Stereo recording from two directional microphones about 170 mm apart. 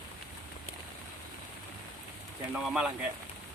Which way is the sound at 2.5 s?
5° right (ahead or behind).